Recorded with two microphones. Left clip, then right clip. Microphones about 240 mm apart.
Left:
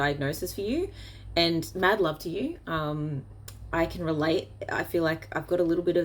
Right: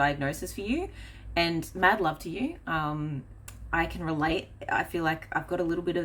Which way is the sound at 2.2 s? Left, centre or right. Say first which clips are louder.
Left 2 dB; centre.